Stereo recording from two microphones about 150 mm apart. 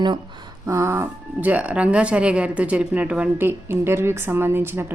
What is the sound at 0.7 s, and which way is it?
Speech, 20° right (ahead or behind).